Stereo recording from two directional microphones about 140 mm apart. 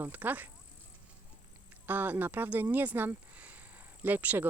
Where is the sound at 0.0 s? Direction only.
10° right (ahead or behind).